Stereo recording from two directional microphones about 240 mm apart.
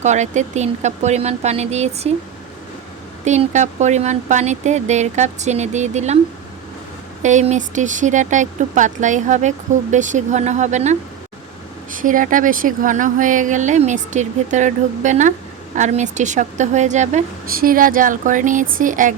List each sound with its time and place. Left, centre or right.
0.0 s speech: right
3.2 s speech: right
7.2 s speech: right